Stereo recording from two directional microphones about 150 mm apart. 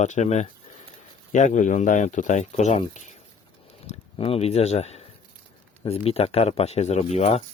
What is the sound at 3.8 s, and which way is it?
Speech, 40° left (ahead or behind).